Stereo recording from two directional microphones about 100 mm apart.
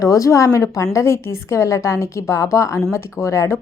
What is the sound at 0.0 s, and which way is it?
A woman's voice, 30° left (ahead or behind).